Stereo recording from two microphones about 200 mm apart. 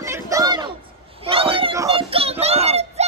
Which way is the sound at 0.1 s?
15° right (ahead or behind).